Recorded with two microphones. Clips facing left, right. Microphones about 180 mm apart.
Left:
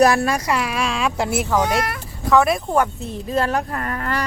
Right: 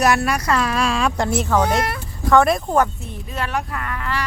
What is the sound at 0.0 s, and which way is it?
Speech, 30° left (ahead or behind).